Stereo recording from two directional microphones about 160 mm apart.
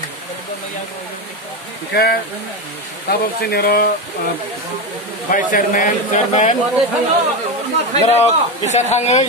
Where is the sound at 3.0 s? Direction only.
70° left (ahead or behind).